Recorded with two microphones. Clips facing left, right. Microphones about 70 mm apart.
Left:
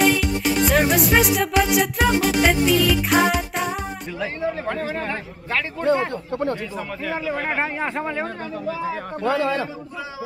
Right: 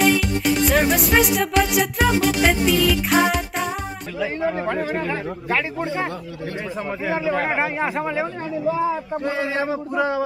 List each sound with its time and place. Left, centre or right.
0.0 s music: centre
4.6 s speech: centre
7.1 s speech: centre
9.2 s a man's voice: left
9.7 s a sound: right